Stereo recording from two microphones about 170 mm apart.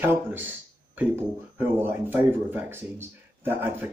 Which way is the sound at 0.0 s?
10° right (ahead or behind).